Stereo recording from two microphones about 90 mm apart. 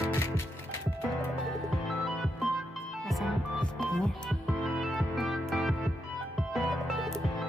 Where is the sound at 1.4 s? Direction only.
Centre (ahead or behind).